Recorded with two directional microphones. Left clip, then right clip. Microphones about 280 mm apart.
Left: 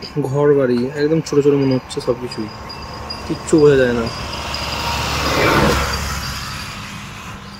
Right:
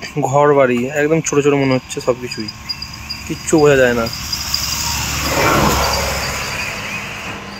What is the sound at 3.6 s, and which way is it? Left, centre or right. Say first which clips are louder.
Speech: right 1 dB; centre.